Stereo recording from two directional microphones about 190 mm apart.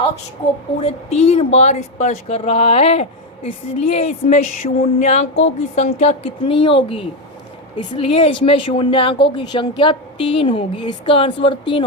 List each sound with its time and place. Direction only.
0.8 s a woman's voice: 30° left (ahead or behind)